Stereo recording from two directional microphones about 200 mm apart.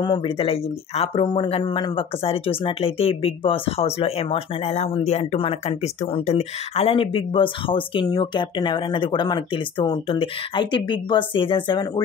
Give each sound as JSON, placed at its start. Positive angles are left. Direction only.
{"t": 0.0, "sound": "speech", "side_deg": 25}